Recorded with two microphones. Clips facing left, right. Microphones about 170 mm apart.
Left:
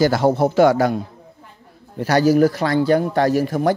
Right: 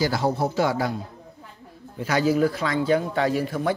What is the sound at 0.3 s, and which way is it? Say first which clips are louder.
Speech: left 9 dB; 85° left.